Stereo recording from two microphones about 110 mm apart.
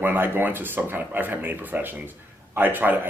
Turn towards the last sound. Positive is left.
turn(degrees=-15)  # may be behind; listen again after turning